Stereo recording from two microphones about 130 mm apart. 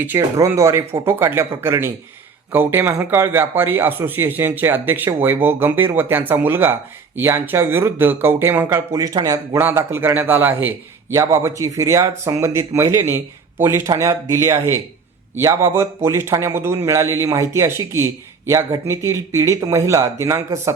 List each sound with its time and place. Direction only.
0.0 s a man's voice: 20° right (ahead or behind)